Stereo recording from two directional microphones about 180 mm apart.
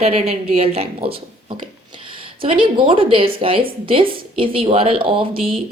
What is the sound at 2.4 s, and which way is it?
A woman's voice, 30° right (ahead or behind).